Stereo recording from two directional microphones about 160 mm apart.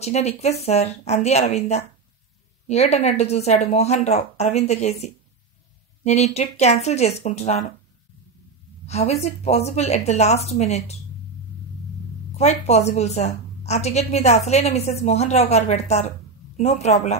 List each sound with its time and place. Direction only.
0.0 s a woman's voice: 45° left (ahead or behind)
8.8 s a woman's voice: 40° left (ahead or behind)
12.4 s a woman's voice: 45° left (ahead or behind)